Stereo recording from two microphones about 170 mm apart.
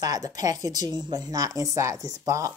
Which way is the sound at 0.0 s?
20° right (ahead or behind).